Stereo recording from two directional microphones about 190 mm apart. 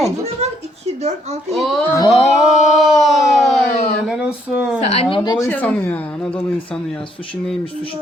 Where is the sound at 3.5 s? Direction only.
30° left (ahead or behind).